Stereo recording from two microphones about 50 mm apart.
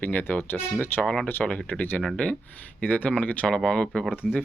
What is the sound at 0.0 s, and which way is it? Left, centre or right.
Speech, left.